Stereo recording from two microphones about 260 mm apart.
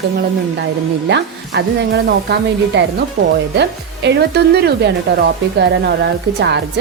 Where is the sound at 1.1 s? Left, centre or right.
Right.